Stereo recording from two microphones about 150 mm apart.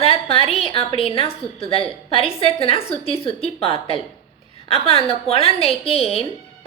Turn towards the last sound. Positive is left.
turn(degrees=40)  # may be behind; listen again after turning